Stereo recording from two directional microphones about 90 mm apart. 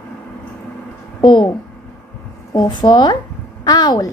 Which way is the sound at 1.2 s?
60° left (ahead or behind).